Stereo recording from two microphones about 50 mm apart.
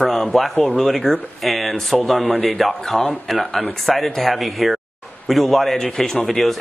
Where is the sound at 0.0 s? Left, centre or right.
Centre.